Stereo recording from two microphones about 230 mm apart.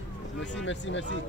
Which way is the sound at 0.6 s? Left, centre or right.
Left.